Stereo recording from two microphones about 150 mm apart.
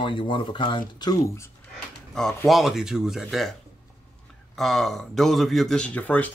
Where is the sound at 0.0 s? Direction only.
35° left (ahead or behind).